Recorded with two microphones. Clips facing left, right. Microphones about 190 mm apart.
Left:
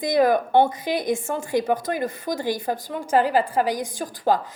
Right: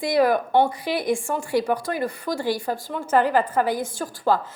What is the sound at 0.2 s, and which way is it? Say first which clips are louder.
Speech: left 1 dB; 45° left (ahead or behind).